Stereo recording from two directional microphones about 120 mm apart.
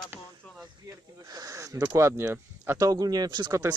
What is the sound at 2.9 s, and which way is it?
Speech, 30° right (ahead or behind).